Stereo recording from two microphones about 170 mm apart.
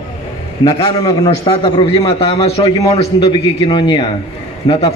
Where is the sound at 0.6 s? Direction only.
25° left (ahead or behind).